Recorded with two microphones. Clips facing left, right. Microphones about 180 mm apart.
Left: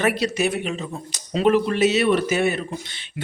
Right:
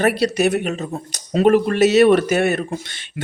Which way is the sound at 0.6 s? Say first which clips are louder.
Right 4 dB; 45° right (ahead or behind).